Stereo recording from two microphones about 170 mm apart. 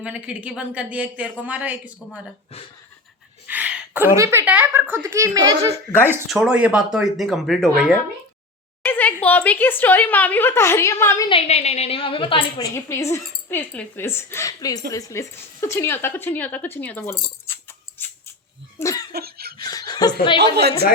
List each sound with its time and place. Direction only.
0.0 s a woman's voice: 5° right (ahead or behind)
3.4 s a woman's voice: 10° right (ahead or behind)
6.2 s speech: 5° right (ahead or behind)
8.8 s a sound: 10° left (ahead or behind)
9.2 s speech: 10° left (ahead or behind)
11.3 s a woman's voice: 35° left (ahead or behind)
12.7 s speech: 15° left (ahead or behind)
17.4 s a sound: 15° left (ahead or behind)
18.8 s laughter: 20° left (ahead or behind)
19.1 s laughter: 65° right (ahead or behind)
19.5 s laughter: 25° left (ahead or behind)
20.4 s a woman's voice: 70° right (ahead or behind)